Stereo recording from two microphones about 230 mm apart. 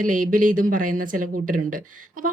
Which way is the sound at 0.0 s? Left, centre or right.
Right.